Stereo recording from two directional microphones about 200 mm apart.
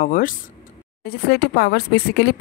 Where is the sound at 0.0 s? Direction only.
45° left (ahead or behind).